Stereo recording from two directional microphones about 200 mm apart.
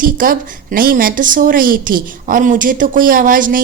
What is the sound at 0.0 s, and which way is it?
A woman's voice, 45° right (ahead or behind).